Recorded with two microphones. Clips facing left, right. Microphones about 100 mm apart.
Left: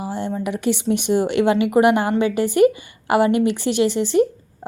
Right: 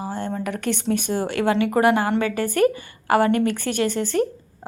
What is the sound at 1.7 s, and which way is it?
A woman's voice, 20° left (ahead or behind).